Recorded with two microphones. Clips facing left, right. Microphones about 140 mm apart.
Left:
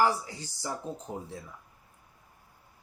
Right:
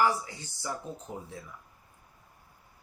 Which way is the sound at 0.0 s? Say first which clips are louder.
Left 1 dB; 35° left (ahead or behind).